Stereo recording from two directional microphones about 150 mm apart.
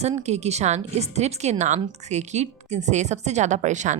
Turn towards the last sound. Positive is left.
turn(degrees=-55)  # may be behind; listen again after turning